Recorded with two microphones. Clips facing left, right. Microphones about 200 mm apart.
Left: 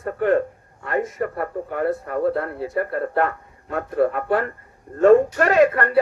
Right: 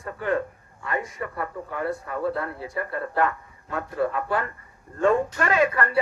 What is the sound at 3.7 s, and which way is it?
A man's voice, 55° left (ahead or behind).